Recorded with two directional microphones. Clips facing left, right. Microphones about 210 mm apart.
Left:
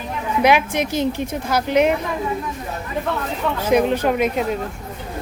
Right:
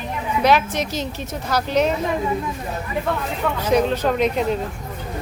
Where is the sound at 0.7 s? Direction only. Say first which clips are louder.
Left 5 dB; 55° left (ahead or behind).